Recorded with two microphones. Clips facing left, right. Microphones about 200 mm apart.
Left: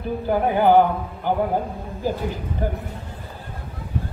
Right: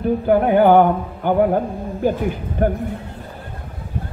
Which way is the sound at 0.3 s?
60° right (ahead or behind).